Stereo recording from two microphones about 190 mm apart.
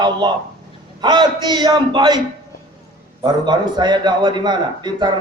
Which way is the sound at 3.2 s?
25° right (ahead or behind).